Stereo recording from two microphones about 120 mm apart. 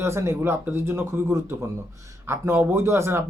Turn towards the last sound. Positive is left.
turn(degrees=-20)  # may be behind; listen again after turning